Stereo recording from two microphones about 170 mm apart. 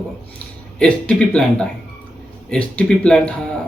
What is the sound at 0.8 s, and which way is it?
Speech, 5° left (ahead or behind).